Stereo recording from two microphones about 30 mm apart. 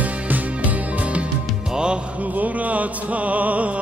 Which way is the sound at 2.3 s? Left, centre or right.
Right.